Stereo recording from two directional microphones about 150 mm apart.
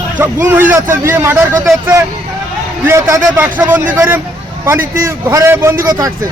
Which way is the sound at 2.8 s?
20° right (ahead or behind).